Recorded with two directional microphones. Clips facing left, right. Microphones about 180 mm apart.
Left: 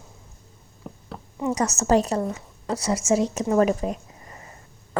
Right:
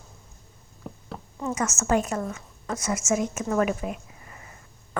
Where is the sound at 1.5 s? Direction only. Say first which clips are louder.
Left 4 dB; 35° left (ahead or behind).